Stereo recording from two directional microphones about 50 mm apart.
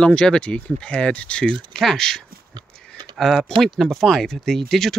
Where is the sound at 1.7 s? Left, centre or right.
Centre.